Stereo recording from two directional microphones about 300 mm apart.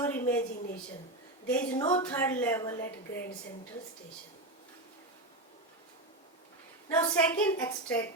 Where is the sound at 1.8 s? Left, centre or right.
Centre.